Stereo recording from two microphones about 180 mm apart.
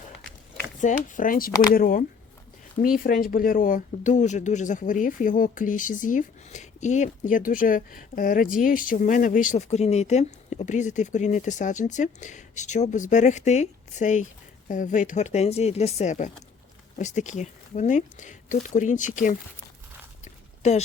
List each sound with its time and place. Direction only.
0.8 s speech: 45° left (ahead or behind)
20.6 s speech: 40° left (ahead or behind)